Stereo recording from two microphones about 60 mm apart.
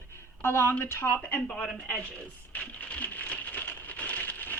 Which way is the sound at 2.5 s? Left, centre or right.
Left.